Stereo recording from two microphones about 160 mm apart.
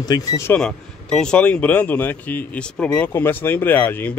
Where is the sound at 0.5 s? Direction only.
5° left (ahead or behind).